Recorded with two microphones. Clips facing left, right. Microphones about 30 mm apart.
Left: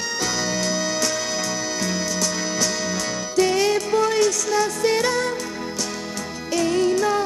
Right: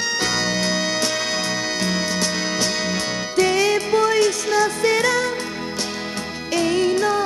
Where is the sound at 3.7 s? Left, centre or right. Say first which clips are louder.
Right 2 dB; right.